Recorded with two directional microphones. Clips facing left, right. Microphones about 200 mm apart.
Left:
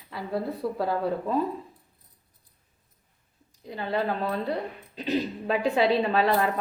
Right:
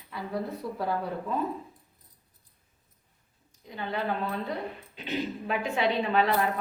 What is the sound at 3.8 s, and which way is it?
A woman's voice, 35° left (ahead or behind).